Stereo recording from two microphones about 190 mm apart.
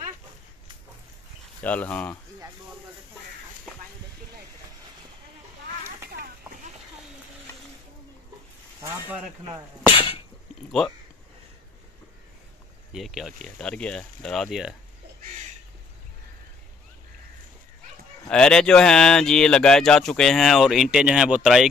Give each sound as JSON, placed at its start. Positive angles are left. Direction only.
{"t": 1.6, "sound": "speech", "side_deg": 10}
{"t": 6.0, "sound": "a sound", "side_deg": -55}
{"t": 9.9, "sound": "cough", "side_deg": 30}
{"t": 12.9, "sound": "speech", "side_deg": 0}
{"t": 18.3, "sound": "speech", "side_deg": 5}